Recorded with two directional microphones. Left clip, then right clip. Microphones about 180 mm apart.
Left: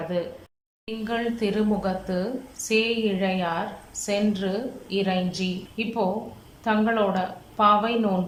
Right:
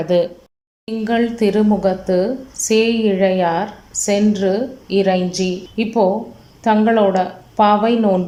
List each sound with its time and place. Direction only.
0.1 s speech: 55° right (ahead or behind)
1.0 s a woman's voice: 35° right (ahead or behind)